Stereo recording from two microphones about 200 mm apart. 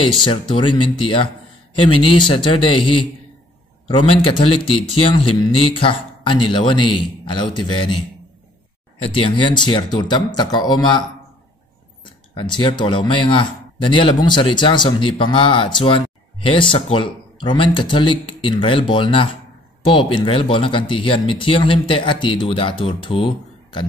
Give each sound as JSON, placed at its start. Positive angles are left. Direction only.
{"t": 0.2, "sound": "speech", "side_deg": 25}
{"t": 9.0, "sound": "speech", "side_deg": 25}